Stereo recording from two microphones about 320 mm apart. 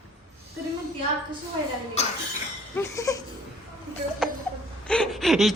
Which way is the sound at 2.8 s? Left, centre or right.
Centre.